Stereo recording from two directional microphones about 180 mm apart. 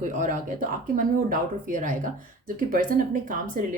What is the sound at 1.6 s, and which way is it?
Speech, 50° right (ahead or behind).